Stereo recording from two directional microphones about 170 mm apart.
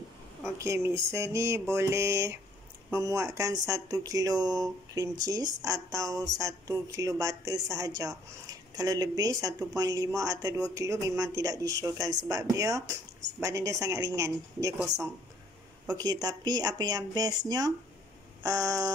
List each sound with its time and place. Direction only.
0.4 s music: 15° right (ahead or behind)
2.9 s speech: 20° right (ahead or behind)